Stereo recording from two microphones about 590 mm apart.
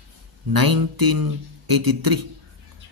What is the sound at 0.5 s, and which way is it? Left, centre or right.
Speech, right.